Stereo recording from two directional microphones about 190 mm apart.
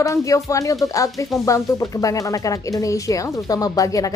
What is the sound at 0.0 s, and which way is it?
Speech, 15° left (ahead or behind).